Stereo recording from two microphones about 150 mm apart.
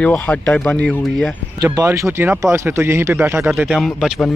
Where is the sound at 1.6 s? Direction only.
20° right (ahead or behind).